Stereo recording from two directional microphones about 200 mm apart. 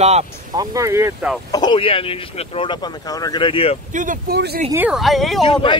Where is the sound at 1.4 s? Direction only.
20° left (ahead or behind).